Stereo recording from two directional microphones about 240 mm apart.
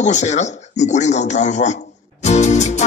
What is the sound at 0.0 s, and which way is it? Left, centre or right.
Speech, left.